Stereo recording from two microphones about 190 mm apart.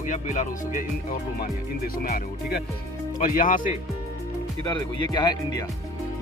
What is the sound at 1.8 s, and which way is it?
Speech, 50° left (ahead or behind).